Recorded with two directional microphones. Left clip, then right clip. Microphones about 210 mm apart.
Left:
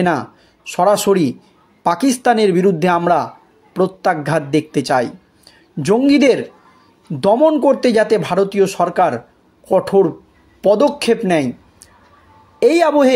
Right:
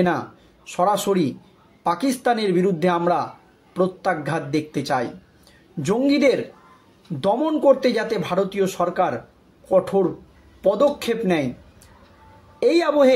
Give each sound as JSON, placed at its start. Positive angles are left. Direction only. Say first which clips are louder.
{"t": 0.7, "sound": "speech", "louder": "left 7 dB", "side_deg": 40}
{"t": 12.5, "sound": "speech", "louder": "left 5 dB", "side_deg": 40}